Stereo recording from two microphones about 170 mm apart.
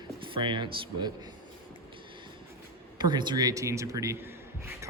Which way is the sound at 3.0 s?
25° right (ahead or behind).